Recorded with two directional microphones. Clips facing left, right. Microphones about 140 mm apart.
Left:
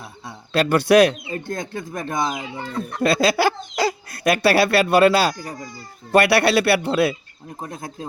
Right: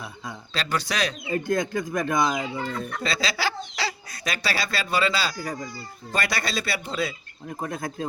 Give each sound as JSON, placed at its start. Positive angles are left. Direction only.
{"t": 0.5, "sound": "speech", "side_deg": 55}
{"t": 1.3, "sound": "speech", "side_deg": 30}
{"t": 3.0, "sound": "speech", "side_deg": 55}
{"t": 7.7, "sound": "speech", "side_deg": 25}